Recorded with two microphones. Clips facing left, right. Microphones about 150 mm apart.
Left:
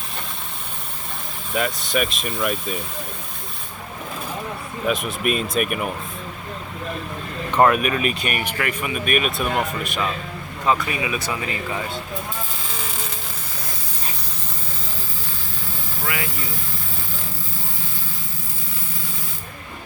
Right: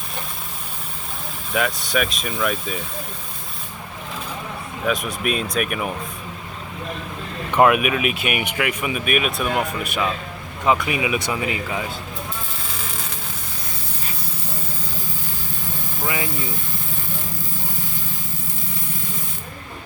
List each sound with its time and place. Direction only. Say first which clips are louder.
1.5 s speech: even; centre (ahead or behind)
4.9 s speech: left 1 dB; centre (ahead or behind)
7.5 s speech: right 1 dB; 10° right (ahead or behind)
10.7 s speech: right 2 dB; 15° right (ahead or behind)
16.0 s speech: right 3 dB; 20° right (ahead or behind)